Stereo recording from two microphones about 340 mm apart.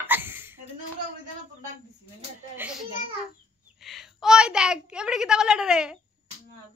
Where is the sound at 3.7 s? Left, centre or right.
Centre.